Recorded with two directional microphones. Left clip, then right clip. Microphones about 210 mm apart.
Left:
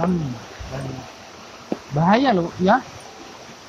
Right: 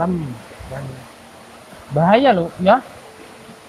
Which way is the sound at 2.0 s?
50° right (ahead or behind).